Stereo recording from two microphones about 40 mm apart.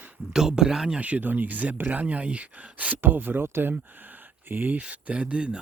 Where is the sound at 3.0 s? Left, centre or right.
Right.